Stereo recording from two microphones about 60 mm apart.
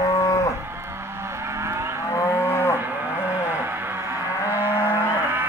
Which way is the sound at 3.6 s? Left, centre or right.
Right.